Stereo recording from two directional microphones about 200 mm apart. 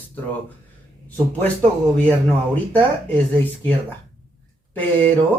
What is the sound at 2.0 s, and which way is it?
Speech, 10° left (ahead or behind).